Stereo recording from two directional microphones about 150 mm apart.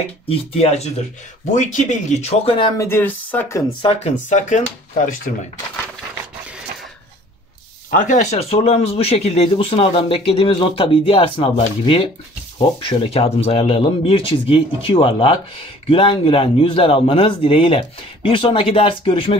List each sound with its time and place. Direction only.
0.3 s speech: 40° left (ahead or behind)
1.4 s speech: 55° left (ahead or behind); by 2.7 s 35° left (ahead or behind)
2.8 s speech: 15° left (ahead or behind)
3.8 s speech: 45° left (ahead or behind); by 5.3 s 60° left (ahead or behind)
7.9 s speech: 55° left (ahead or behind); by 19.3 s 35° left (ahead or behind)